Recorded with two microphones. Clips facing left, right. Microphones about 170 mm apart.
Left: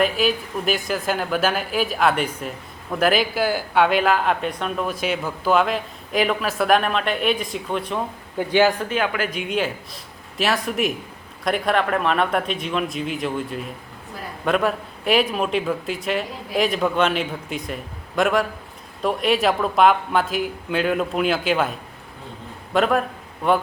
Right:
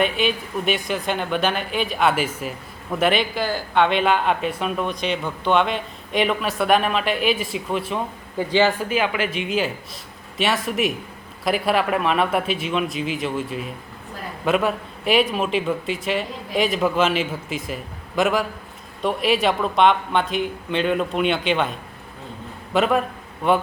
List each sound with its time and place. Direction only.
0.0 s a man's voice: centre (ahead or behind)